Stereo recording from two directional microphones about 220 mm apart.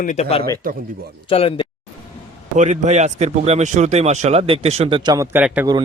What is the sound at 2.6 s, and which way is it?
Speech, 30° right (ahead or behind).